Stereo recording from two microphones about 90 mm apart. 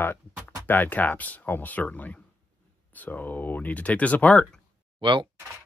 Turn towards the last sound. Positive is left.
turn(degrees=-65)  # may be behind; listen again after turning